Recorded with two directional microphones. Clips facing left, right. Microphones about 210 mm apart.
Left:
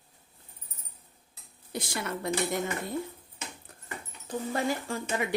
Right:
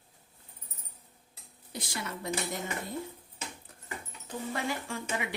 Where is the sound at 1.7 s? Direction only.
55° left (ahead or behind).